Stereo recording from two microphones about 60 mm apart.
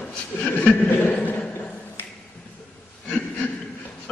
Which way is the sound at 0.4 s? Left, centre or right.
Left.